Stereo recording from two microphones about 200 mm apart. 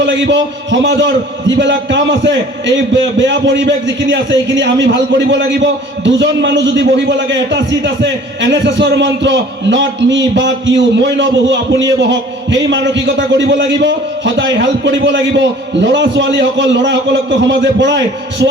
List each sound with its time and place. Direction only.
0.0 s a man's voice: 65° right (ahead or behind)